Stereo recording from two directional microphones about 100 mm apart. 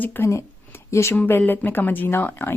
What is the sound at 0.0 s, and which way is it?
Speech, 20° left (ahead or behind).